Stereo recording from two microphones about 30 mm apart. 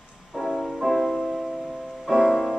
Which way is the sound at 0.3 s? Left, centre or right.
Centre.